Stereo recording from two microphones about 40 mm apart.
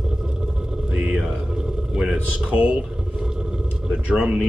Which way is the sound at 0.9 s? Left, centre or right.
Centre.